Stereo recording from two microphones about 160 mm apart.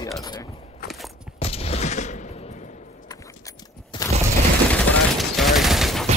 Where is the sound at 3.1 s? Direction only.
20° left (ahead or behind).